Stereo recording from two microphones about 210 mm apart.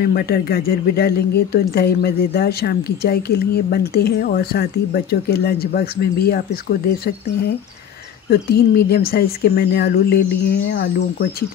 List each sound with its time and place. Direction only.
0.0 s a woman's voice: 45° left (ahead or behind)
8.3 s a woman's voice: 50° left (ahead or behind)